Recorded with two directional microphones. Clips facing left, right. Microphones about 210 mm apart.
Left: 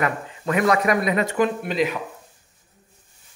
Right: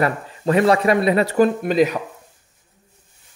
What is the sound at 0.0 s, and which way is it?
Speech, 30° right (ahead or behind).